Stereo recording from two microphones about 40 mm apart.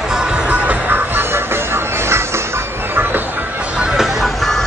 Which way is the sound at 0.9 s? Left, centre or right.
Right.